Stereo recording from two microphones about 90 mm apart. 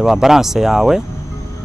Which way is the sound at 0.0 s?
5° right (ahead or behind).